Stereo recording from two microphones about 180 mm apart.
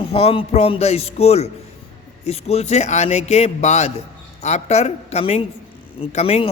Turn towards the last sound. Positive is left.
turn(degrees=35)  # may be behind; listen again after turning